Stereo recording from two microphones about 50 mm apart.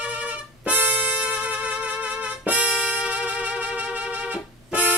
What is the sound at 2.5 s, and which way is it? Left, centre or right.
Music, right.